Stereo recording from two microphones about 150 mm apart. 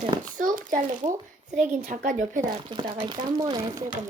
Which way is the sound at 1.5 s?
55° right (ahead or behind).